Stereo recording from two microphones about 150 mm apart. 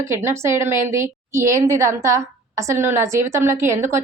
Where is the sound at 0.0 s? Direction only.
15° right (ahead or behind).